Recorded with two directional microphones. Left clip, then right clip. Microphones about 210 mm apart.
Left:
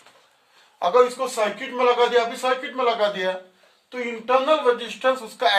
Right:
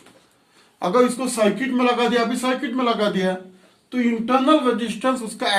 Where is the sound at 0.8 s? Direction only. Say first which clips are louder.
Left 1 dB; 10° left (ahead or behind).